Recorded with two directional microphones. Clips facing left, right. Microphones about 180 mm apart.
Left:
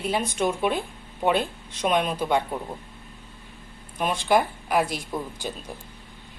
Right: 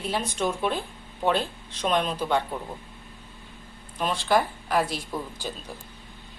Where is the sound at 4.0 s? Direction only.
15° left (ahead or behind).